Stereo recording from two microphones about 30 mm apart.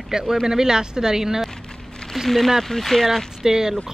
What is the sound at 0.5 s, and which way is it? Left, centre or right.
Speech, right.